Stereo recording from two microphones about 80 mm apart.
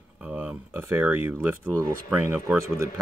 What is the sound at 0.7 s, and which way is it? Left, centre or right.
Speech, right.